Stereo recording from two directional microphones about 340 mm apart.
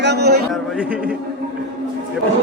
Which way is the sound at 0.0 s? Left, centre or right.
Right.